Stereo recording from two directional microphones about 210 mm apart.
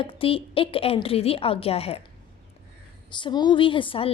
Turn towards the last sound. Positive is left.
turn(degrees=25)  # may be behind; listen again after turning